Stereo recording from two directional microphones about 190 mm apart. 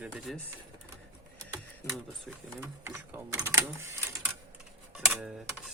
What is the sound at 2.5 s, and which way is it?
Speech, 10° right (ahead or behind).